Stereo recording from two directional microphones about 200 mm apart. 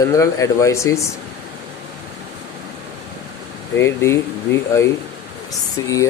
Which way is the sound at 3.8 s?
15° left (ahead or behind).